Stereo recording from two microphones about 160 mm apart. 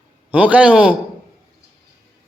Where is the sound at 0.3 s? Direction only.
10° right (ahead or behind).